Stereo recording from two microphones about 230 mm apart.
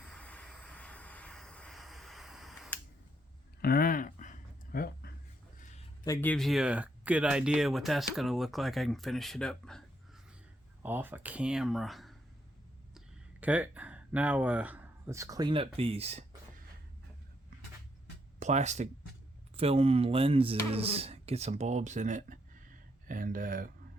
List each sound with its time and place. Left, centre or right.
0.0 s a sound: centre
3.6 s a sound: left
6.1 s speech: centre
10.8 s speech: centre
13.4 s speech: centre; by 16.2 s right
18.3 s speech: right